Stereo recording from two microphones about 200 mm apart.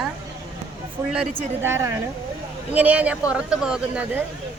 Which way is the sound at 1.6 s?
15° right (ahead or behind).